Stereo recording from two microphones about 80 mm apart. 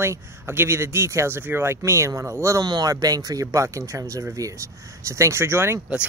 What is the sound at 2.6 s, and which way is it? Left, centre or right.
Speech, right.